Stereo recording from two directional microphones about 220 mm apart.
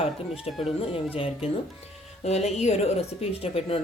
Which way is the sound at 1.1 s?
25° left (ahead or behind).